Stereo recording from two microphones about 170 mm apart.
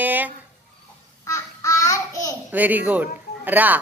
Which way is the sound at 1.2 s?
20° left (ahead or behind).